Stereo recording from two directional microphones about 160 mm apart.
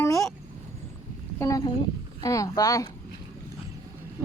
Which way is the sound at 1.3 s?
20° left (ahead or behind).